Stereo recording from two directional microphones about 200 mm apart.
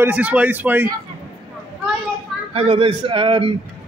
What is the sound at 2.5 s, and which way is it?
Speech, 30° right (ahead or behind).